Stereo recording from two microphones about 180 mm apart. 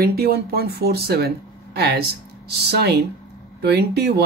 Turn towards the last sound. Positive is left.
turn(degrees=-65)  # may be behind; listen again after turning